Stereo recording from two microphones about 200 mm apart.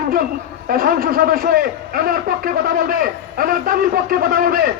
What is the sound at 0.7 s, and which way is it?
Speech, 45° right (ahead or behind).